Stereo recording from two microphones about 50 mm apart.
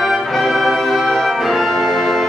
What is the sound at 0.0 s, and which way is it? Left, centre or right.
Music, centre.